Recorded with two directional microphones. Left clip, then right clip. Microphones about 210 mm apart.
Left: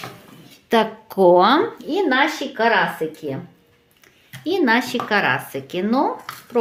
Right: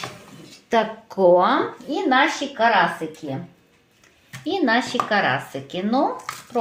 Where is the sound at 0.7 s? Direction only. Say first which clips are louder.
Left 2 dB; 35° left (ahead or behind).